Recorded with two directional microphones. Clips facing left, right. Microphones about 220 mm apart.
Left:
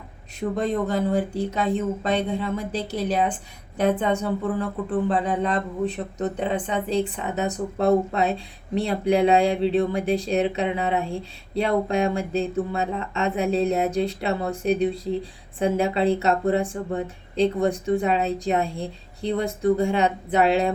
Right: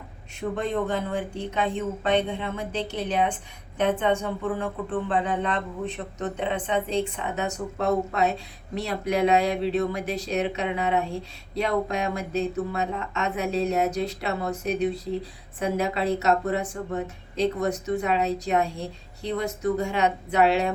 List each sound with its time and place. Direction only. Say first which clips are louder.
0.3 s speech: left 3 dB; 35° left (ahead or behind)